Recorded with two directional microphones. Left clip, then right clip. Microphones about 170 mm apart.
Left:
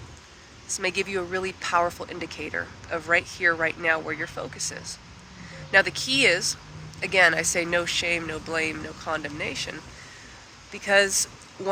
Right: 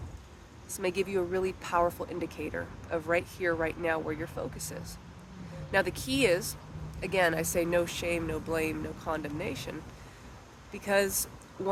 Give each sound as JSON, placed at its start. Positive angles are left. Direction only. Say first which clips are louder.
{"t": 0.7, "sound": "speech", "louder": "left 4 dB", "side_deg": -15}